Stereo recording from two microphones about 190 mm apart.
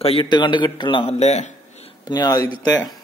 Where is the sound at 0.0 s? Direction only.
30° left (ahead or behind).